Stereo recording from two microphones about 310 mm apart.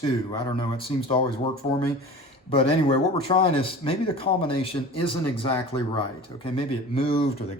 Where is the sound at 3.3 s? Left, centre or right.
Centre.